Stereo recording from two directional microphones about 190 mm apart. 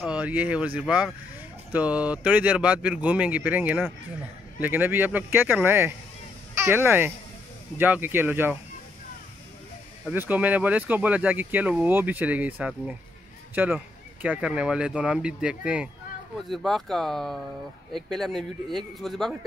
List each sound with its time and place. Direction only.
0.0 s speech: 5° right (ahead or behind)
10.0 s speech: 10° right (ahead or behind)